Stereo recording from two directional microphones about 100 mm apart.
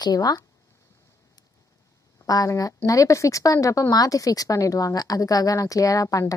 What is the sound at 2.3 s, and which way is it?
Speech, 35° left (ahead or behind).